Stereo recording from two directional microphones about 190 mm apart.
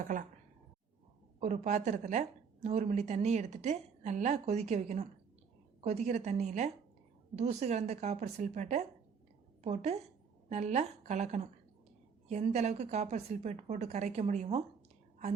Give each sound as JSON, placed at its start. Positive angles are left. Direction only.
{"t": 0.0, "sound": "speech", "side_deg": -45}
{"t": 1.4, "sound": "a woman's voice", "side_deg": -40}